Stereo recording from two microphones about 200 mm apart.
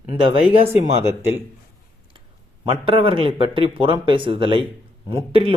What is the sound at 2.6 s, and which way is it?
Speech, 25° right (ahead or behind).